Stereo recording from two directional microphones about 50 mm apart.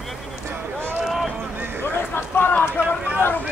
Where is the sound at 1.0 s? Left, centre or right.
Centre.